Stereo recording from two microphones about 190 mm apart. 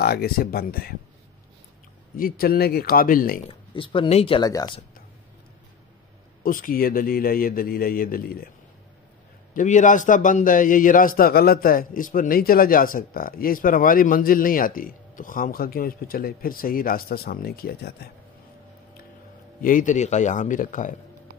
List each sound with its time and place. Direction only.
0.0 s a man's voice: 55° left (ahead or behind)
2.1 s a man's voice: 50° left (ahead or behind)
3.4 s speech: 25° left (ahead or behind)
6.4 s a man's voice: 45° left (ahead or behind)
9.5 s a man's voice: 40° left (ahead or behind)
19.6 s a man's voice: 45° left (ahead or behind)